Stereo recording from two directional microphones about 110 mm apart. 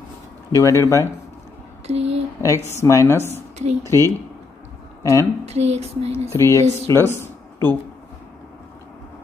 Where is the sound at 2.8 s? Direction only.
25° left (ahead or behind).